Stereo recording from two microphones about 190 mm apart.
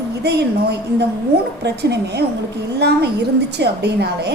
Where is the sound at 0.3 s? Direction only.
60° right (ahead or behind).